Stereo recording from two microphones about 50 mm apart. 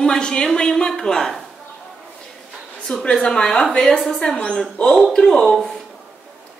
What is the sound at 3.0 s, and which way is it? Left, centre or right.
Speech, centre.